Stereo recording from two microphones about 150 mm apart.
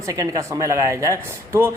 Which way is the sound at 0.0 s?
20° right (ahead or behind).